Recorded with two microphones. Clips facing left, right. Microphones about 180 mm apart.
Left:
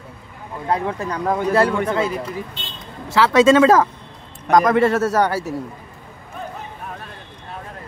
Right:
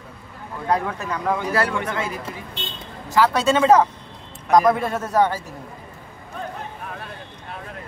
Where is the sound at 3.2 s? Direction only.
90° left.